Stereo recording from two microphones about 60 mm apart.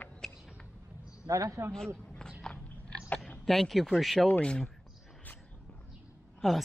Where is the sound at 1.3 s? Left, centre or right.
Right.